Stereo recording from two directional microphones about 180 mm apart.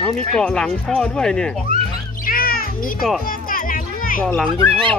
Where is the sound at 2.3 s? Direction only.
55° left (ahead or behind).